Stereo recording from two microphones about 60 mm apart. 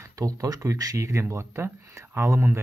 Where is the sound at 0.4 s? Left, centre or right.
Right.